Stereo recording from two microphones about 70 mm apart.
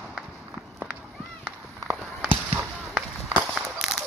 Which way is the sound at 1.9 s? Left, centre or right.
Right.